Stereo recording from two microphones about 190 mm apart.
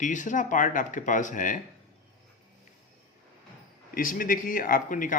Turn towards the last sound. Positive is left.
turn(degrees=45)  # may be behind; listen again after turning